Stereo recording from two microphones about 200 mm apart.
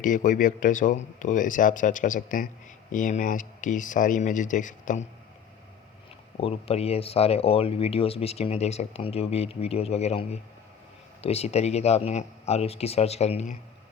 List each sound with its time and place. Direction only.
0.0 s speech: 40° left (ahead or behind)
6.3 s speech: 30° left (ahead or behind)